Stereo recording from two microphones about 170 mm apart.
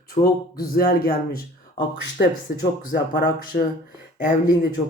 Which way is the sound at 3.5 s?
55° left (ahead or behind).